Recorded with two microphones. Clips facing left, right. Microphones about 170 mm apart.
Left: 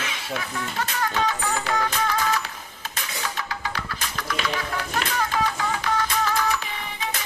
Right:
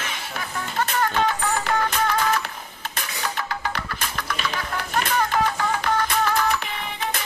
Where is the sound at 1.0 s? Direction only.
50° right (ahead or behind).